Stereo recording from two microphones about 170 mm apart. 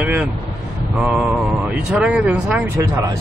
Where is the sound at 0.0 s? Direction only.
5° right (ahead or behind).